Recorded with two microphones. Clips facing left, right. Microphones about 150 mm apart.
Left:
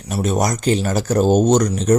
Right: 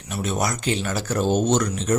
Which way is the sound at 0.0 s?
40° left (ahead or behind).